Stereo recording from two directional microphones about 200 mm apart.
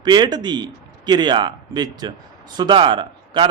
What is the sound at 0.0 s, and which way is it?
A man's voice, 20° right (ahead or behind).